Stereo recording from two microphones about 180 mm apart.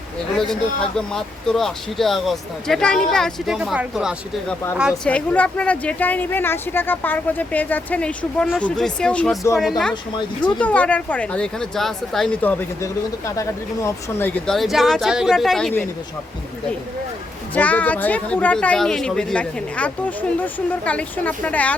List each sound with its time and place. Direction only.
0.3 s a woman's voice: 5° left (ahead or behind)
9.9 s speech: 25° left (ahead or behind)
10.6 s speech: 10° left (ahead or behind)
17.5 s a woman's voice: 10° left (ahead or behind)